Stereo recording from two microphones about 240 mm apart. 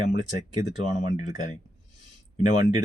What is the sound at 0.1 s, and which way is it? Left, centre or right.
Speech, left.